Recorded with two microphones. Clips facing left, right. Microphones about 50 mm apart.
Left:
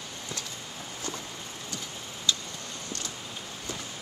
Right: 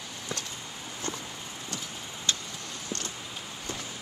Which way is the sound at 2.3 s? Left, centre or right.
Right.